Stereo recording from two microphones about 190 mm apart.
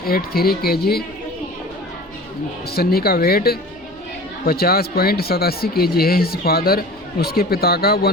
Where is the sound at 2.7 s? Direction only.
55° left (ahead or behind).